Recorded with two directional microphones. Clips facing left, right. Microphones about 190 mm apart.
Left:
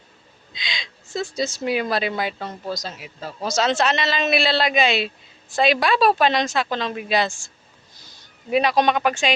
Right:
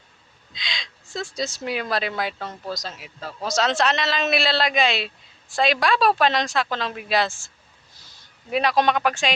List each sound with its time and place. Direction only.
0.5 s speech: centre (ahead or behind)